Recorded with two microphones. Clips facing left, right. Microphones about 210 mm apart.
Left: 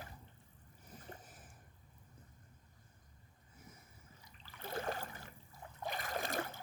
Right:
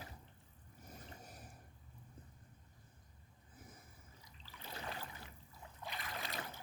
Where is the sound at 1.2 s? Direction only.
40° right (ahead or behind).